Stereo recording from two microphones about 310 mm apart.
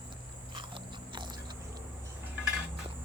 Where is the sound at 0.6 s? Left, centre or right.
Centre.